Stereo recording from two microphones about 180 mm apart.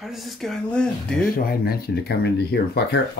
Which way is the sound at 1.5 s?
60° left (ahead or behind).